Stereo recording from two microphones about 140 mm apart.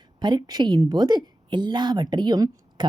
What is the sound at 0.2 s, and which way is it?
A woman's voice, 30° right (ahead or behind).